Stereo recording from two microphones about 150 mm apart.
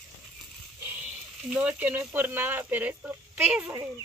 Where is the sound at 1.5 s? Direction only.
10° right (ahead or behind).